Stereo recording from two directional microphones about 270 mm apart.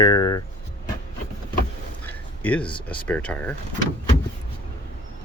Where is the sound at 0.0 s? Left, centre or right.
Centre.